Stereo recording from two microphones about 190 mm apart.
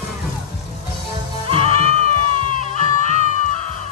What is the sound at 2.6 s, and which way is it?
Music, 40° left (ahead or behind).